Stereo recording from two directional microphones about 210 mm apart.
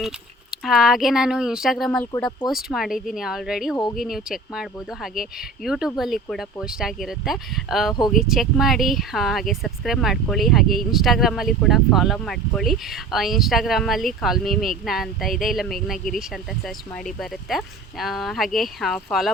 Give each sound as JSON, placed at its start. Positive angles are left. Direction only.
{"t": 0.5, "sound": "speech", "side_deg": 0}